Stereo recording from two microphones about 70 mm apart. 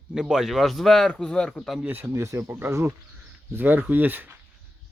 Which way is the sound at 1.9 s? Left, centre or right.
Right.